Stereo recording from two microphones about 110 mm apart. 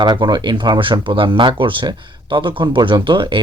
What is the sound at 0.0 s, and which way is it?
Speech, 40° right (ahead or behind).